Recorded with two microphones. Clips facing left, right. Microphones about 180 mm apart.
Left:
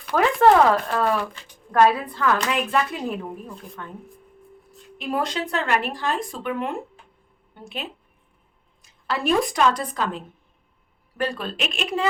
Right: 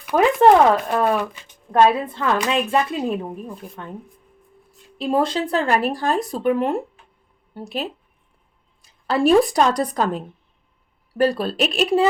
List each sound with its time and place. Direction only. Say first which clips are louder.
0.0 s a woman's voice: right 3 dB; 15° right (ahead or behind)
4.9 s a woman's voice: right 6 dB; 30° right (ahead or behind)